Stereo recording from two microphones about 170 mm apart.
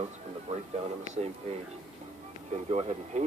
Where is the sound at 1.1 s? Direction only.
40° right (ahead or behind).